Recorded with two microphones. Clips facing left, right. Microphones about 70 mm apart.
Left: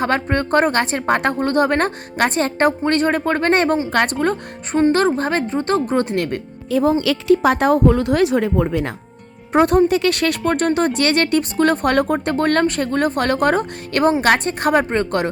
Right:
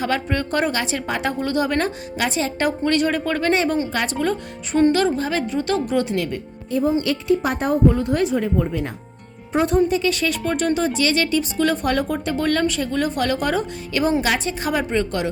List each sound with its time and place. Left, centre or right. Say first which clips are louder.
0.0 s a woman's voice: left 4 dB; left
6.7 s a woman's voice: left 3 dB; left
9.5 s speech: left 4 dB; left